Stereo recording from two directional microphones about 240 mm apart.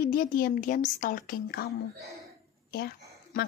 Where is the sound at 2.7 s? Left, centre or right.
Left.